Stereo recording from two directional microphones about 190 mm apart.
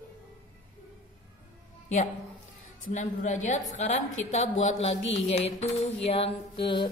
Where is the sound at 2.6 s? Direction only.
40° left (ahead or behind).